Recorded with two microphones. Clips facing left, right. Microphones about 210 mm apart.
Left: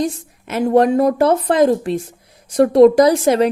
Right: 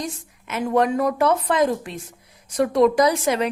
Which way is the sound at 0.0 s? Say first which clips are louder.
Left 10 dB; 35° left (ahead or behind).